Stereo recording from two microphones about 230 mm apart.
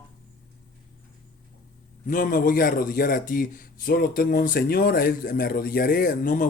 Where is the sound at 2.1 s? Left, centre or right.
Left.